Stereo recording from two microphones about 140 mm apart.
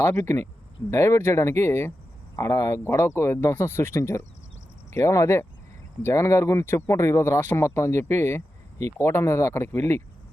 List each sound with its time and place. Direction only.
0.2 s speech: 20° left (ahead or behind)